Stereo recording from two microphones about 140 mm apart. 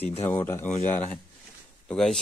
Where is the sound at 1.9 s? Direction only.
5° left (ahead or behind).